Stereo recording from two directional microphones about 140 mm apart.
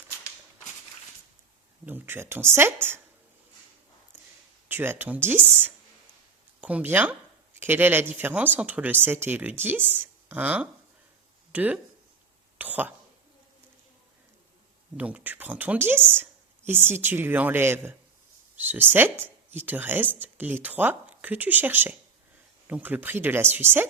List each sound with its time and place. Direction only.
1.8 s speech: 15° right (ahead or behind)
4.7 s speech: 15° right (ahead or behind)
6.6 s speech: 10° right (ahead or behind)
14.9 s speech: 10° right (ahead or behind)